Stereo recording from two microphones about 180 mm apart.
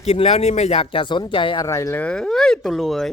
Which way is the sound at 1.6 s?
15° left (ahead or behind).